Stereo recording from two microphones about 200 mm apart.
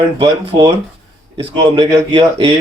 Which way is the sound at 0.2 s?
20° right (ahead or behind).